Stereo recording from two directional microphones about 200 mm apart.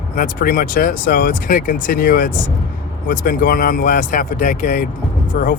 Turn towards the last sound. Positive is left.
turn(degrees=40)  # may be behind; listen again after turning